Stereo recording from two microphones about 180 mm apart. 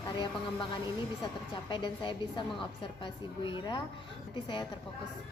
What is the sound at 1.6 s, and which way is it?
A woman's voice, 25° left (ahead or behind).